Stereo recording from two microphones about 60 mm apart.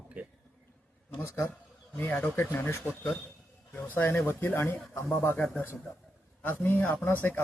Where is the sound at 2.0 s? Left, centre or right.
Left.